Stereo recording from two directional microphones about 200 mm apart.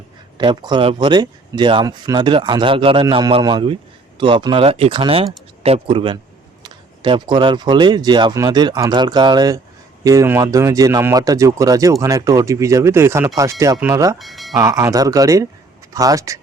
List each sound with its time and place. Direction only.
0.3 s speech: 20° right (ahead or behind)
14.2 s speech: centre (ahead or behind)
14.5 s speech: 15° right (ahead or behind)